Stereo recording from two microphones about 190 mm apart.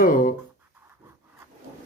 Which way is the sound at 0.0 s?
45° left (ahead or behind).